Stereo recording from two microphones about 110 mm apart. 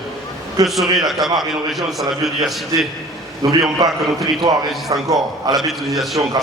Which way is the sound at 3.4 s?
40° right (ahead or behind).